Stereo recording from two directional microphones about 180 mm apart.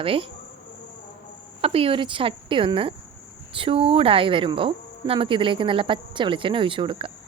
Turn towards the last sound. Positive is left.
turn(degrees=-30)  # may be behind; listen again after turning